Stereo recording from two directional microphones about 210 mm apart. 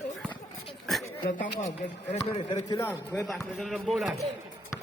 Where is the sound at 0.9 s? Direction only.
Centre (ahead or behind).